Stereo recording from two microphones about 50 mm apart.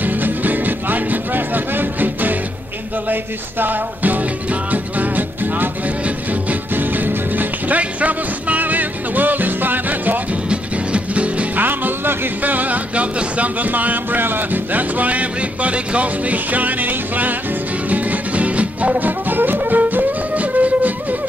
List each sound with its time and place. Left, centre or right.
0.0 s music: right
6.7 s music: right
10.5 s music: right
11.5 s music: right